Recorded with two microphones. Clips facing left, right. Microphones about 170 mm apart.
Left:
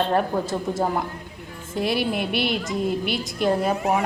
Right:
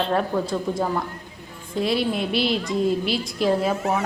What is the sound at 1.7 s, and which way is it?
A woman's voice, centre (ahead or behind).